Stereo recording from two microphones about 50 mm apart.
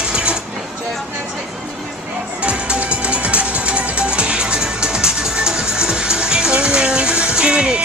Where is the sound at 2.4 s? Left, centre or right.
Right.